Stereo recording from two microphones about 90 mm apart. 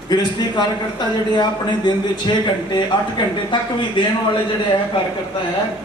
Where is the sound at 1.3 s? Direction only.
55° left (ahead or behind).